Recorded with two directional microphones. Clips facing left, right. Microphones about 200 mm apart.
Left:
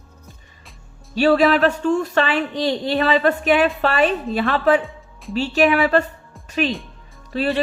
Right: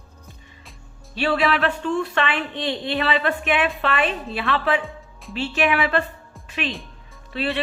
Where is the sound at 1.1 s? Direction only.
40° left (ahead or behind).